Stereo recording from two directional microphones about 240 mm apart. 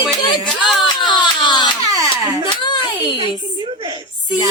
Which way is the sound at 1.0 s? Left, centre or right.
Centre.